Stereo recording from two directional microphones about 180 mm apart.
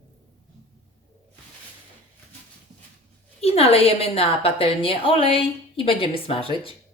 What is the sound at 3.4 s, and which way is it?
A woman's voice, 35° left (ahead or behind).